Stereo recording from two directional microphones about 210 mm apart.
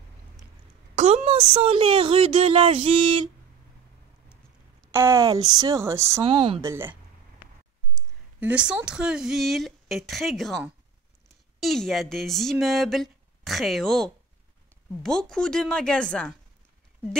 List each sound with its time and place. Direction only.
0.9 s a woman's voice: 30° right (ahead or behind)
4.9 s speech: 15° right (ahead or behind)
6.2 s speech: 25° right (ahead or behind)
6.6 s speech: 10° right (ahead or behind)
8.4 s speech: 5° right (ahead or behind)